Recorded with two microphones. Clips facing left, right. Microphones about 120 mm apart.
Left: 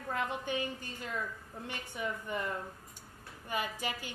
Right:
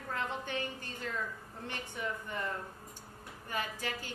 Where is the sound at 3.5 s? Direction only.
15° left (ahead or behind).